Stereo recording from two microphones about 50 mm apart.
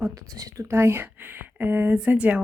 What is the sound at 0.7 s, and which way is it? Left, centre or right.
Speech, right.